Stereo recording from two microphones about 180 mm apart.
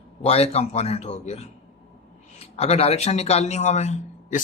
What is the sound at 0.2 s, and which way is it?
Speech, 35° left (ahead or behind).